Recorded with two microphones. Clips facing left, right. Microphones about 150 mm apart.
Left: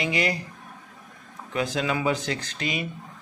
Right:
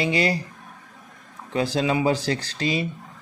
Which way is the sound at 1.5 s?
30° right (ahead or behind).